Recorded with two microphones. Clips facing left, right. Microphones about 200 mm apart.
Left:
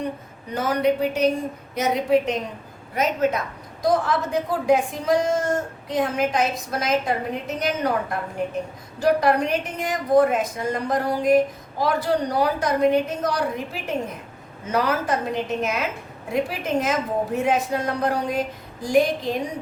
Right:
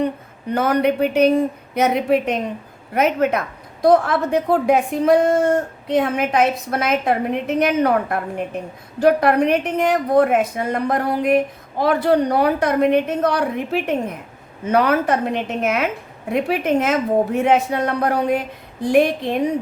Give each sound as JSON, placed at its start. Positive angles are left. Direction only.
{"t": 0.5, "sound": "a woman's voice", "side_deg": -60}